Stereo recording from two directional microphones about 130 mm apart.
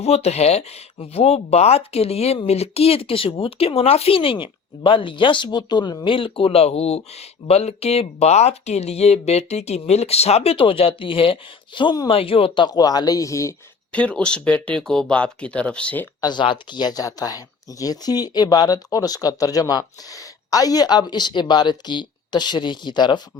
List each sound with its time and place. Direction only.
0.0 s speech: 55° left (ahead or behind); by 13.6 s 25° left (ahead or behind)
13.9 s speech: 10° left (ahead or behind)
16.2 s speech: 35° left (ahead or behind)